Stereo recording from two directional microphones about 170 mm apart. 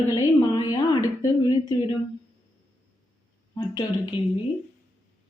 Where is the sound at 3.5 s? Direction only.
25° left (ahead or behind).